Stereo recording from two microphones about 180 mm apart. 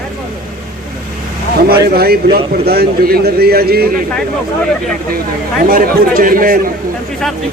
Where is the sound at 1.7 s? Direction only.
60° right (ahead or behind).